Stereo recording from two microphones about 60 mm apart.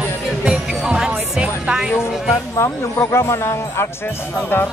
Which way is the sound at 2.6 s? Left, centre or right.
Left.